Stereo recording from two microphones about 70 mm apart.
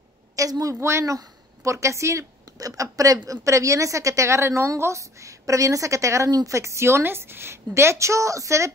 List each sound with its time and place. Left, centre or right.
0.4 s a woman's voice: right
0.7 s a woman's voice: right